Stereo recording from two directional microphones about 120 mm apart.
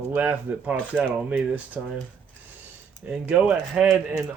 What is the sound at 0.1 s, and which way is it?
Speech, 15° right (ahead or behind).